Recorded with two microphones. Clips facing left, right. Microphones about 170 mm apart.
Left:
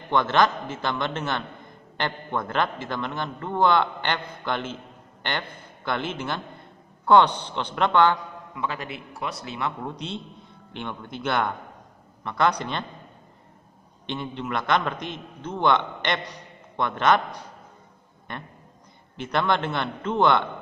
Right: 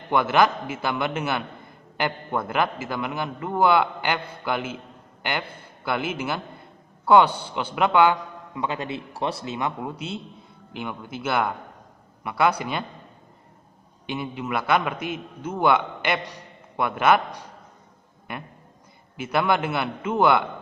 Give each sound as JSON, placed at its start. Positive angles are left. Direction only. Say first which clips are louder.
{"t": 0.1, "sound": "a man's voice", "louder": "right 1 dB", "side_deg": -10}
{"t": 8.5, "sound": "a man's voice", "louder": "right 3 dB", "side_deg": -25}
{"t": 14.0, "sound": "a man's voice", "louder": "right 1 dB", "side_deg": -5}
{"t": 18.3, "sound": "a man's voice", "louder": "right 2 dB", "side_deg": -10}